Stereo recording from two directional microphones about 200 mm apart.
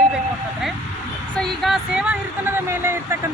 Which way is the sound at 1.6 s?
5° right (ahead or behind).